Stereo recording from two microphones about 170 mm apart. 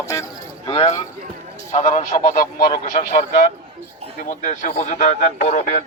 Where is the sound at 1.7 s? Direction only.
45° left (ahead or behind).